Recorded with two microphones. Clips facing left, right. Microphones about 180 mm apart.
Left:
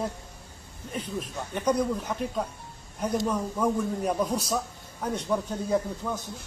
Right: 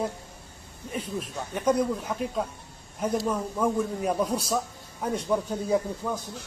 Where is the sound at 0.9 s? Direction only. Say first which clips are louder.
Right 1 dB; 5° right (ahead or behind).